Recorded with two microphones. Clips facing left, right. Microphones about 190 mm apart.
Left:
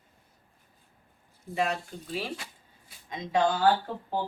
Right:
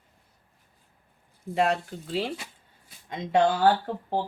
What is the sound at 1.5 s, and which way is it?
Speech, 60° right (ahead or behind).